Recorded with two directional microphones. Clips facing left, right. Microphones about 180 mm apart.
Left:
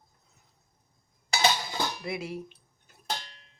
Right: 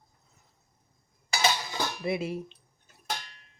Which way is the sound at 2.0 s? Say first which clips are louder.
Right 4 dB; 20° right (ahead or behind).